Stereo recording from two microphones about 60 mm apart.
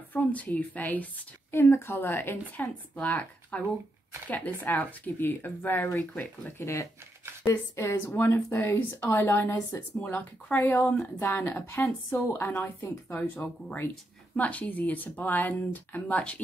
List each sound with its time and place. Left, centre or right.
0.1 s speech: left
1.5 s speech: left
3.0 s speech: left
4.6 s speech: left
6.6 s speech: left
7.7 s speech: left
14.3 s speech: left